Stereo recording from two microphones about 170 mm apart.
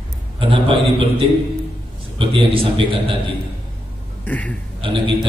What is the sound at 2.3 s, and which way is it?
Speech, 30° right (ahead or behind).